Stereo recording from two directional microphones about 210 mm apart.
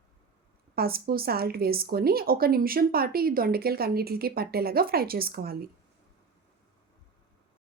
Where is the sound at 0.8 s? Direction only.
45° right (ahead or behind).